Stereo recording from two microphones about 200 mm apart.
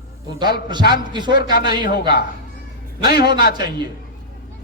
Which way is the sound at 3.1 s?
50° left (ahead or behind).